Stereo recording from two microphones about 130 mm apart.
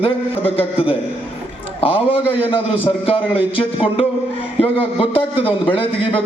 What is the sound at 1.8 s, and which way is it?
A man's voice, 45° left (ahead or behind).